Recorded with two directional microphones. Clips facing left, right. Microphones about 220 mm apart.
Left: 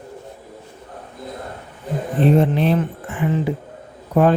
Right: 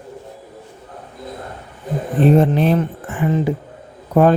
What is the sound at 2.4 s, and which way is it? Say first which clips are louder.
Speech: right 2 dB; 45° right (ahead or behind).